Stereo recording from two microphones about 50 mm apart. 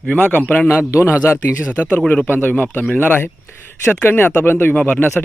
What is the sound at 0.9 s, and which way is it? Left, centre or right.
Speech, left.